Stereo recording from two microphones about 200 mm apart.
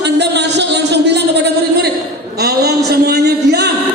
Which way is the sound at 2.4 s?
55° right (ahead or behind).